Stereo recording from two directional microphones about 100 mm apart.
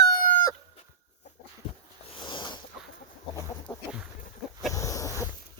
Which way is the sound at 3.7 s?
45° left (ahead or behind).